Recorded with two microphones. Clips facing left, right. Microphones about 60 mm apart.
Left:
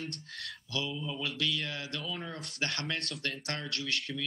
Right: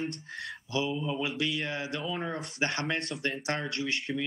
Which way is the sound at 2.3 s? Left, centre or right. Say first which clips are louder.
Right 5 dB; centre.